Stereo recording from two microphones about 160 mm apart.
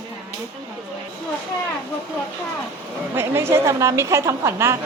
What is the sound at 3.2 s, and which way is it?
A woman's voice, 15° right (ahead or behind).